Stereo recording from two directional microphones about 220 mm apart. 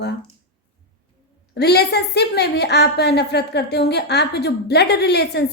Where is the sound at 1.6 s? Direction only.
50° left (ahead or behind).